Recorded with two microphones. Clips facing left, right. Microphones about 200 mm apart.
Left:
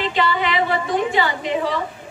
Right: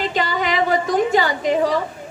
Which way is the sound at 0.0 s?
40° right (ahead or behind).